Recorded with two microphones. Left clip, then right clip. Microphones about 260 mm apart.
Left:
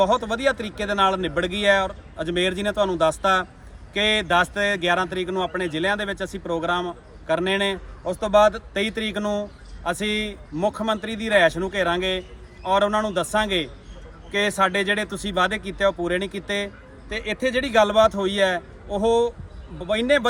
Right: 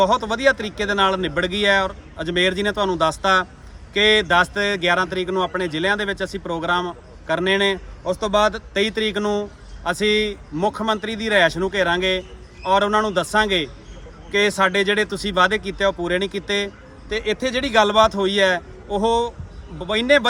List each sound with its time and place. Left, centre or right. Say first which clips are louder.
0.0 s speech: right 3 dB; centre
18.9 s a man's voice: right 1 dB; left
19.9 s speech: right 3 dB; centre